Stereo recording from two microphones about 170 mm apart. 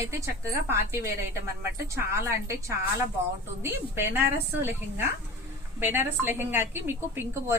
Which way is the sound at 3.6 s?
15° right (ahead or behind).